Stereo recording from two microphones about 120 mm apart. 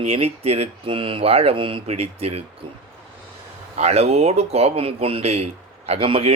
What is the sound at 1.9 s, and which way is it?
Speech, 55° right (ahead or behind).